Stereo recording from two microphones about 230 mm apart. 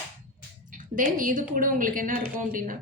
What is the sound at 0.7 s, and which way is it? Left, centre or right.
A woman's voice, right.